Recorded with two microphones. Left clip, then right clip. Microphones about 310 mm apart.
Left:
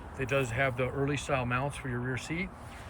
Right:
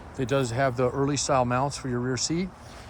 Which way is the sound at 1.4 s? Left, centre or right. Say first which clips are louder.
Right 7 dB; right.